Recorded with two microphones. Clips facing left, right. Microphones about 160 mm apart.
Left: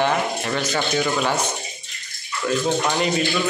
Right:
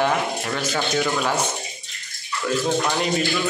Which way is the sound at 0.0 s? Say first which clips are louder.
Left 1 dB; centre (ahead or behind).